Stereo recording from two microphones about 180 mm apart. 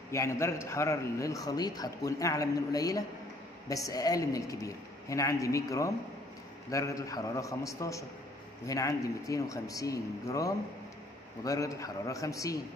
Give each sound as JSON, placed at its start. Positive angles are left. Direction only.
{"t": 0.1, "sound": "a man's voice", "side_deg": 15}